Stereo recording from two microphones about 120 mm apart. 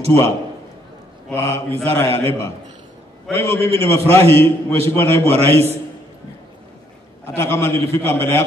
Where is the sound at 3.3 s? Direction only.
20° left (ahead or behind).